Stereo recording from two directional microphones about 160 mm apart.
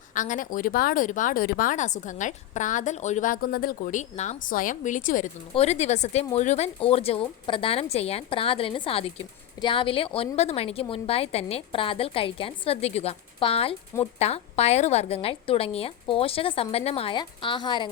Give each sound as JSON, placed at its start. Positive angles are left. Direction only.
{"t": 0.1, "sound": "speech", "side_deg": 55}
{"t": 4.2, "sound": "speech", "side_deg": 55}
{"t": 5.5, "sound": "speech", "side_deg": 45}